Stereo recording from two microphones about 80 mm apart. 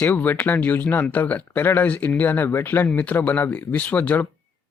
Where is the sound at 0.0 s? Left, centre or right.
Left.